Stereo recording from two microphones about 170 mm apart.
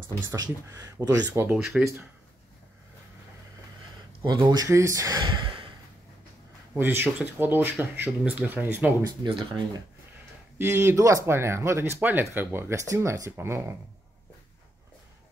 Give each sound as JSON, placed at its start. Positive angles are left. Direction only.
{"t": 0.3, "sound": "speech", "side_deg": -20}
{"t": 4.2, "sound": "speech", "side_deg": -20}
{"t": 6.7, "sound": "speech", "side_deg": -10}
{"t": 9.2, "sound": "speech", "side_deg": -30}
{"t": 10.6, "sound": "speech", "side_deg": -15}